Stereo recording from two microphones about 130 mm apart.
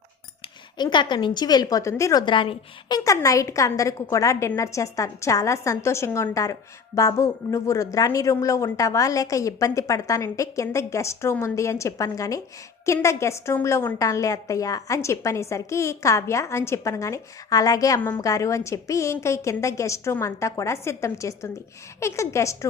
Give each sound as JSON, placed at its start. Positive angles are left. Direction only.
{"t": 0.8, "sound": "a woman's voice", "side_deg": 35}
{"t": 2.2, "sound": "a woman's voice", "side_deg": 40}
{"t": 3.0, "sound": "a woman's voice", "side_deg": 25}